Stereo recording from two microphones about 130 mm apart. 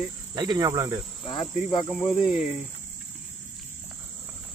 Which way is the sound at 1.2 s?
40° left (ahead or behind).